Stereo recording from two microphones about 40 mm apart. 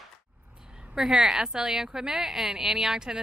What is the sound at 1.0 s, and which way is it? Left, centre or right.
A woman's voice, centre.